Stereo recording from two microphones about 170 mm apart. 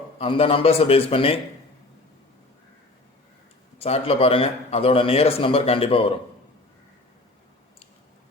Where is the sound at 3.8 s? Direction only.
35° left (ahead or behind).